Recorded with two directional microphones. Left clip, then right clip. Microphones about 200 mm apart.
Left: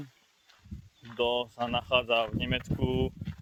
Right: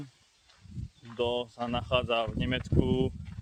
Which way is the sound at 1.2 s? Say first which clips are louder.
Left 2 dB; 10° right (ahead or behind).